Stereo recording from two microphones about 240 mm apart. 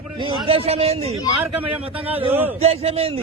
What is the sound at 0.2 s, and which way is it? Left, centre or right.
A man's voice, right.